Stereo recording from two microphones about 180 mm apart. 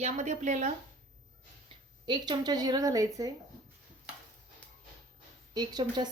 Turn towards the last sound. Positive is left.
turn(degrees=-25)  # may be behind; listen again after turning